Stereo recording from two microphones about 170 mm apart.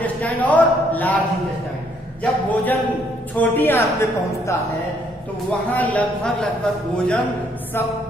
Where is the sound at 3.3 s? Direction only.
10° left (ahead or behind).